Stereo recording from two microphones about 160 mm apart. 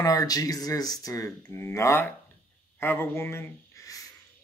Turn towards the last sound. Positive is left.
turn(degrees=20)  # may be behind; listen again after turning